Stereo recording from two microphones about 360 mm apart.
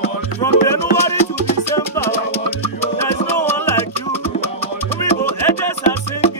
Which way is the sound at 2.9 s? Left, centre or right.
Centre.